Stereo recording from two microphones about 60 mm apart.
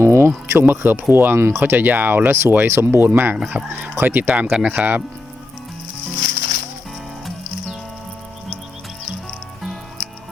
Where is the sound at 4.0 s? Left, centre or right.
Right.